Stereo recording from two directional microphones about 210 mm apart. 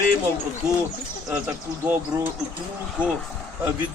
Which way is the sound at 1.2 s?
5° right (ahead or behind).